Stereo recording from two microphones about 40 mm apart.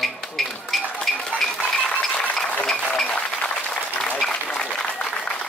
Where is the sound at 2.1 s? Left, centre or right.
Left.